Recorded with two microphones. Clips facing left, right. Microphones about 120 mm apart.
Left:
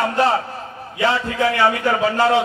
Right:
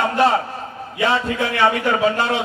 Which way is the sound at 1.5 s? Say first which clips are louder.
Right 2 dB; 20° right (ahead or behind).